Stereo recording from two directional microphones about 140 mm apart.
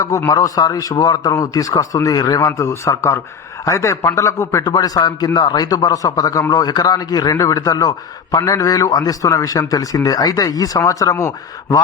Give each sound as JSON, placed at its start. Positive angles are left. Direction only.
{"t": 0.0, "sound": "a man's voice", "side_deg": 20}